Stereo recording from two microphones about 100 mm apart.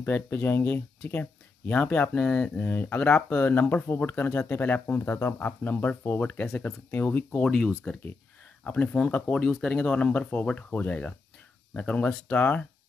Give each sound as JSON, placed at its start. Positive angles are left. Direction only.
{"t": 0.0, "sound": "speech", "side_deg": 20}